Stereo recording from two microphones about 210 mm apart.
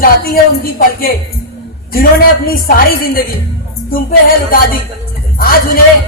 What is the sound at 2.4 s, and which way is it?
Speech, 45° left (ahead or behind).